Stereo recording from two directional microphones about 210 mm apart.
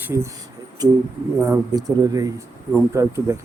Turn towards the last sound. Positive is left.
turn(degrees=-15)  # may be behind; listen again after turning